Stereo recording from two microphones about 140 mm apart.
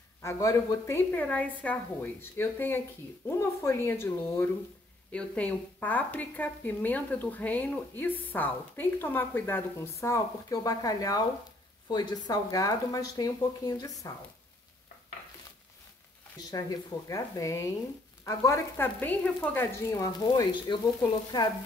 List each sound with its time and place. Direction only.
0.2 s a woman's voice: 20° left (ahead or behind)
16.4 s a woman's voice: 25° left (ahead or behind)